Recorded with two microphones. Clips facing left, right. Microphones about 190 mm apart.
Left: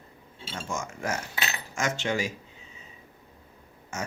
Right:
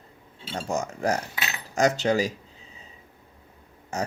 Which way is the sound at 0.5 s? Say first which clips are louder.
Right 6 dB; 35° right (ahead or behind).